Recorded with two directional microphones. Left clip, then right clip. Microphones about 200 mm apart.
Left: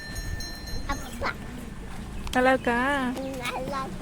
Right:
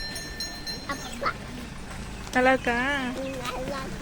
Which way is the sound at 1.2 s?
35° left (ahead or behind).